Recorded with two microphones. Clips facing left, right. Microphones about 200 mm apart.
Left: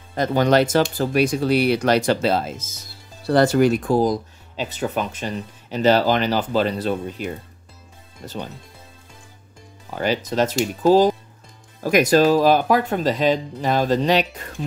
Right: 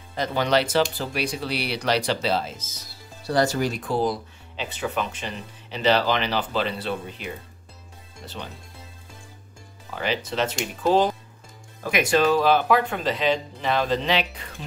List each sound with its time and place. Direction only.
0.1 s speech: 50° left (ahead or behind)
9.9 s speech: 45° left (ahead or behind)